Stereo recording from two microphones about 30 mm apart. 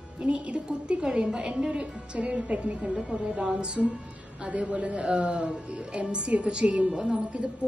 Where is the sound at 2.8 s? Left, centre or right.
Centre.